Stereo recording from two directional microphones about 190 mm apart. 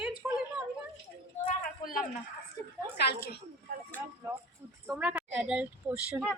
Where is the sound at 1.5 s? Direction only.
45° left (ahead or behind).